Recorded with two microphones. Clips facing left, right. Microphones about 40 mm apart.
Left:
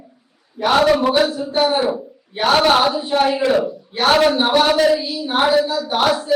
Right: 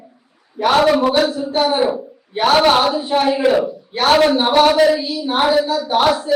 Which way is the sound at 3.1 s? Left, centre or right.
Centre.